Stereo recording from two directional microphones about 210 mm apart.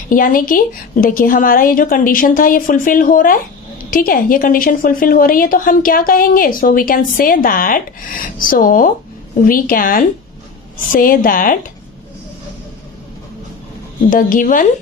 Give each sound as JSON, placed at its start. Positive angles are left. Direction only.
{"t": 0.1, "sound": "a woman's voice", "side_deg": 40}
{"t": 14.1, "sound": "a woman's voice", "side_deg": 40}